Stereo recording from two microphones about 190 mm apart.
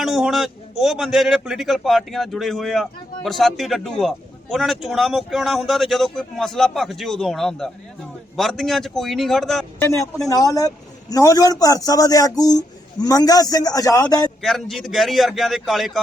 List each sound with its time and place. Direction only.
0.0 s speech: centre (ahead or behind)
9.8 s speech: 15° left (ahead or behind)
14.4 s speech: centre (ahead or behind)